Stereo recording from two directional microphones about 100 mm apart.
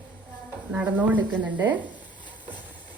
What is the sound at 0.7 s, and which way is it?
Speech, 15° right (ahead or behind).